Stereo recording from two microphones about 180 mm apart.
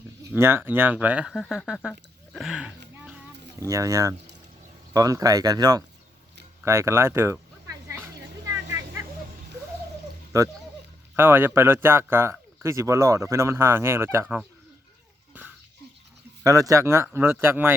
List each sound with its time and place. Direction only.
0.2 s speech: 15° right (ahead or behind)
3.7 s speech: 15° right (ahead or behind)
6.7 s a sound: 15° right (ahead or behind)
10.3 s speech: 15° right (ahead or behind)
15.3 s a sound: 10° right (ahead or behind)
16.4 s speech: 20° right (ahead or behind)